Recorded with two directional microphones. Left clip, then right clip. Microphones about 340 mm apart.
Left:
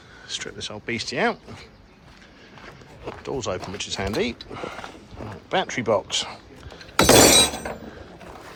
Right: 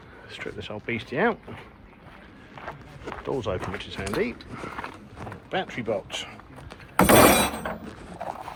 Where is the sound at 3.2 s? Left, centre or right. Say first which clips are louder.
Even; centre.